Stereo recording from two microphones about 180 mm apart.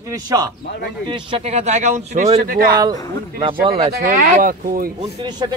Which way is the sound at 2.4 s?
55° right (ahead or behind).